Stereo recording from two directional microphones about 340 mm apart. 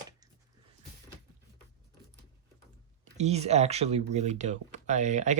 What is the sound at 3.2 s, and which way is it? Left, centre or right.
Speech, centre.